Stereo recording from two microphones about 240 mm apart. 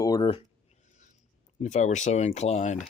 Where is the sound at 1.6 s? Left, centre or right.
Left.